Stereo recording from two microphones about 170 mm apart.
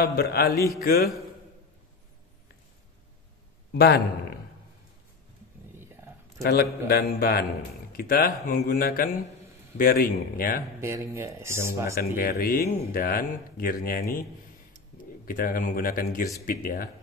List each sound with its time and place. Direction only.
0.0 s a man's voice: 65° left (ahead or behind)
3.7 s a man's voice: 75° left (ahead or behind)
5.8 s a sound: 15° right (ahead or behind)
6.4 s a man's voice: 70° left (ahead or behind)
10.8 s speech: 15° right (ahead or behind)
11.9 s speech: 60° left (ahead or behind)
15.2 s speech: 55° left (ahead or behind)